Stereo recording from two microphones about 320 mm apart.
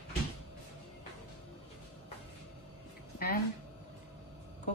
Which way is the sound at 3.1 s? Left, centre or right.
Left.